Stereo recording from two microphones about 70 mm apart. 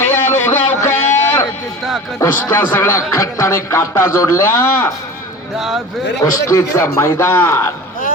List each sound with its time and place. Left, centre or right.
0.1 s a sound: left
2.3 s speech: left
2.9 s speech: left
5.5 s speech: centre
6.5 s speech: left